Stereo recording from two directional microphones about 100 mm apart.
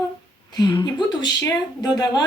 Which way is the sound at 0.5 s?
50° left (ahead or behind).